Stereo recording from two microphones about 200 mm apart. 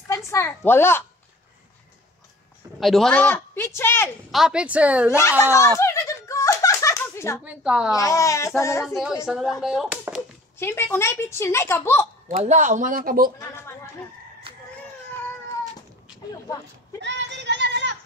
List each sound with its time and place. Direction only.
0.1 s a child's voice: 15° left (ahead or behind)
2.8 s a woman's voice: centre (ahead or behind)
4.3 s speech: centre (ahead or behind)
5.4 s a woman's voice: 15° left (ahead or behind)
5.8 s a sound: 15° left (ahead or behind)
7.4 s speech: 5° right (ahead or behind)
7.9 s a woman's voice: 15° left (ahead or behind)
8.8 s speech: centre (ahead or behind)
10.6 s a woman's voice: 10° left (ahead or behind)
12.4 s speech: 40° right (ahead or behind)
13.4 s a woman's voice: 10° left (ahead or behind)
14.5 s baby cry: 25° right (ahead or behind)
17.0 s a sound: 60° right (ahead or behind)